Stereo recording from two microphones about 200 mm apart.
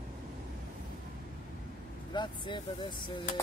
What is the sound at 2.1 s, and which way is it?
Speech, 25° left (ahead or behind).